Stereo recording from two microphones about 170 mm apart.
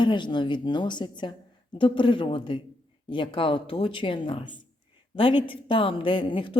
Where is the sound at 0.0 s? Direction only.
25° left (ahead or behind).